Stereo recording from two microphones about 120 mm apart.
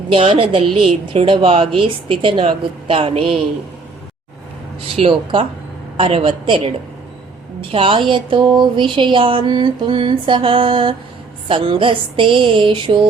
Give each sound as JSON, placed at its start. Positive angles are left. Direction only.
{"t": 0.1, "sound": "a woman's voice", "side_deg": -45}
{"t": 4.9, "sound": "a woman's voice", "side_deg": -50}